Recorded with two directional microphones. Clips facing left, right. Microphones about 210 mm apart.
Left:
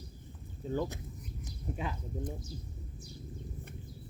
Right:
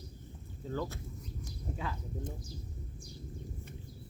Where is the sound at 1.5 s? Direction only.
20° left (ahead or behind).